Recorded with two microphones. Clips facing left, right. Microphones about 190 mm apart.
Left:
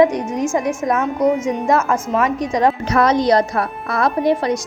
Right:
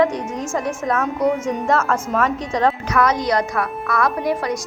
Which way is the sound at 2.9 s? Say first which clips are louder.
Left 4 dB; 30° left (ahead or behind).